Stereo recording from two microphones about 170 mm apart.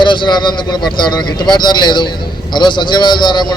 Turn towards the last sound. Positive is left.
turn(degrees=25)  # may be behind; listen again after turning